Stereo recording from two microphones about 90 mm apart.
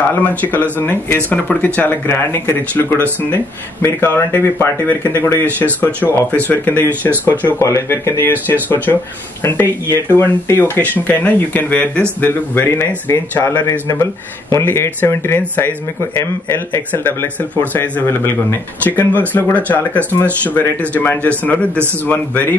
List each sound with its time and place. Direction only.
0.1 s speech: 15° left (ahead or behind)
7.6 s speech: 35° left (ahead or behind)